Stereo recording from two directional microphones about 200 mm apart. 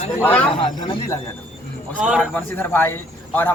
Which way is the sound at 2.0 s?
5° right (ahead or behind).